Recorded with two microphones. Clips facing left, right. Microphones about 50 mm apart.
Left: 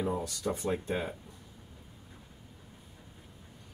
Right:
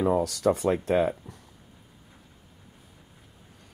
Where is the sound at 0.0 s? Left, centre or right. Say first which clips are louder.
Right 10 dB; right.